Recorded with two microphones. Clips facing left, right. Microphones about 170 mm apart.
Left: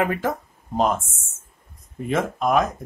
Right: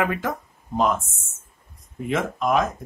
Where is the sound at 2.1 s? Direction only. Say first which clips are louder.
Left 1 dB; 50° left (ahead or behind).